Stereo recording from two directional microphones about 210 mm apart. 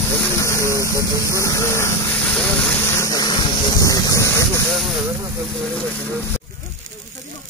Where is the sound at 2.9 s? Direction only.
15° left (ahead or behind).